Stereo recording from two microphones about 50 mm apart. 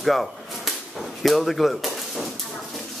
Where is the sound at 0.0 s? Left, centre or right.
Centre.